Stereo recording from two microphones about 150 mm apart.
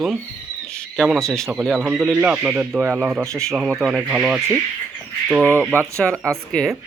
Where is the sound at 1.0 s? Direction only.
Centre (ahead or behind).